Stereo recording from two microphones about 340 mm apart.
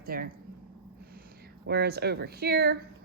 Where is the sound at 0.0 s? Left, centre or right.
Right.